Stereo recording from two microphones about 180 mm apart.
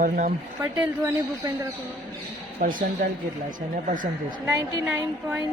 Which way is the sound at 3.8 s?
50° right (ahead or behind).